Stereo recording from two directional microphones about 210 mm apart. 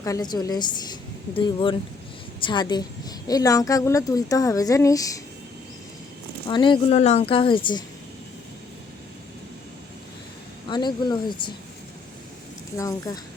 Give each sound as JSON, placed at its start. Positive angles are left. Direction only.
{"t": 0.0, "sound": "a woman's voice", "side_deg": 15}
{"t": 6.5, "sound": "speech", "side_deg": 20}
{"t": 10.7, "sound": "speech", "side_deg": 20}
{"t": 12.7, "sound": "a woman's voice", "side_deg": 15}